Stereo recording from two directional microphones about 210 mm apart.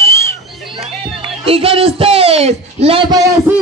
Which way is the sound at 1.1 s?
25° right (ahead or behind).